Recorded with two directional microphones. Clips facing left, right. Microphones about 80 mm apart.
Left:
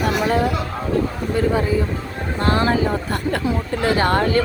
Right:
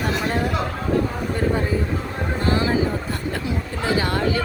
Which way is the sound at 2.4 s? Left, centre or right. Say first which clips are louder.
Left 3 dB; left.